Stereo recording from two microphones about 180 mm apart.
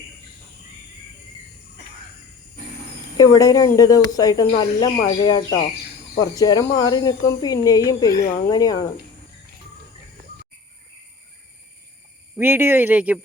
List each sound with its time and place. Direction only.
3.2 s speech: 20° left (ahead or behind)
12.4 s speech: 10° right (ahead or behind)